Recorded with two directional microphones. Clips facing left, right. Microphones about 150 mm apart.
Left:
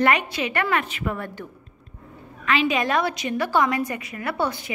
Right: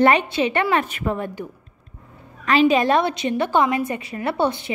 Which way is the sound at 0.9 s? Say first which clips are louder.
Right 2 dB; 50° right (ahead or behind).